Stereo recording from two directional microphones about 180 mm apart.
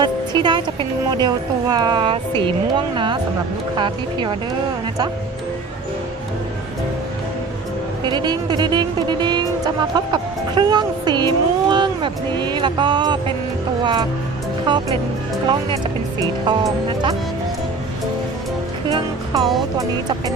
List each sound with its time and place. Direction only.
0.4 s speech: 25° right (ahead or behind)
8.0 s speech: 25° right (ahead or behind)
16.5 s speech: 25° right (ahead or behind)
18.9 s music: 20° right (ahead or behind)